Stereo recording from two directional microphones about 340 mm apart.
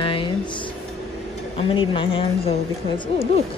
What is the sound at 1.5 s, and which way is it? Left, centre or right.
A woman's voice, centre.